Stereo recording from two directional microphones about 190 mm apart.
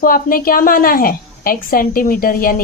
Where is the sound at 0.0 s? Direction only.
50° left (ahead or behind).